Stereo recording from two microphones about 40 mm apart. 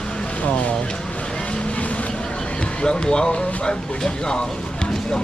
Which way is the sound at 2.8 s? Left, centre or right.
Left.